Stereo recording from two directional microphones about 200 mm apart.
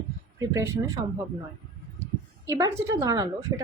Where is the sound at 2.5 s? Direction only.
15° right (ahead or behind).